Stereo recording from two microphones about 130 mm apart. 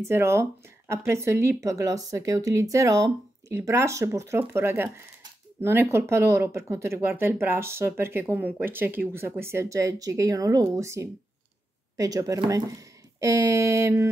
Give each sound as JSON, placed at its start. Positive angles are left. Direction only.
{"t": 0.0, "sound": "speech", "side_deg": -20}